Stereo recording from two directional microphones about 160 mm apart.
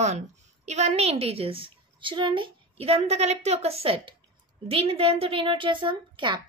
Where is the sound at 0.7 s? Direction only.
45° right (ahead or behind).